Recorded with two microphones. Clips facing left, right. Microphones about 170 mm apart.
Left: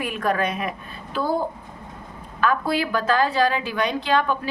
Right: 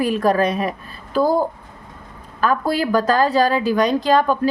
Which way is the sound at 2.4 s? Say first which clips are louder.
Right 3 dB; 40° right (ahead or behind).